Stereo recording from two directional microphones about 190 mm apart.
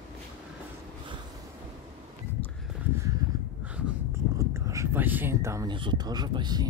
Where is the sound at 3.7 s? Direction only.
5° right (ahead or behind).